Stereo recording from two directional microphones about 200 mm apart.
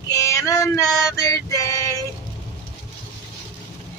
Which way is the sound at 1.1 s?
15° left (ahead or behind).